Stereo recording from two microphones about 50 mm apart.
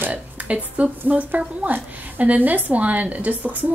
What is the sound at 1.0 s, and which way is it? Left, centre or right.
A woman's voice, right.